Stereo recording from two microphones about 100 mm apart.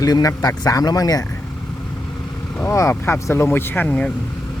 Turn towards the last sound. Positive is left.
turn(degrees=15)  # may be behind; listen again after turning